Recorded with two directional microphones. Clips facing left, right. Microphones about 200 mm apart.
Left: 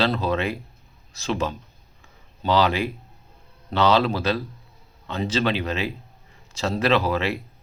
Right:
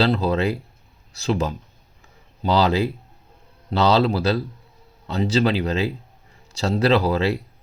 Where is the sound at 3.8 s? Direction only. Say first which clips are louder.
Right 2 dB; 35° right (ahead or behind).